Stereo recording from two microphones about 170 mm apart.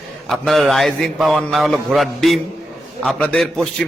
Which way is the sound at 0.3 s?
Centre (ahead or behind).